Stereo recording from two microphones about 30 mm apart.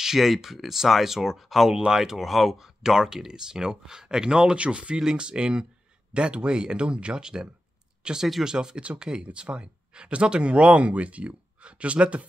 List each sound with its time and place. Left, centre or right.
0.0 s speech: centre
1.4 s speech: centre
1.9 s speech: centre
2.2 s speech: centre; by 4.6 s right
4.6 s speech: right
4.9 s speech: right
9.2 s speech: right